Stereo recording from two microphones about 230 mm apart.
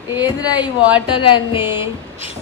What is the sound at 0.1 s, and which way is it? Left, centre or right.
Speech, centre.